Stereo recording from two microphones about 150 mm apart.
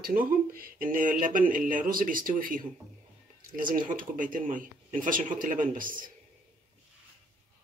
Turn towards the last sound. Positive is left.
turn(degrees=-65)  # may be behind; listen again after turning